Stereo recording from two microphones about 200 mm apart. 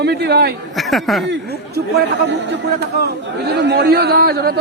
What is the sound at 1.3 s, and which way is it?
Speech, 55° right (ahead or behind).